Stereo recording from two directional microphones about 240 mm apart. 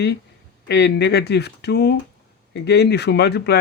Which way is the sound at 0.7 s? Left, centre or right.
Left.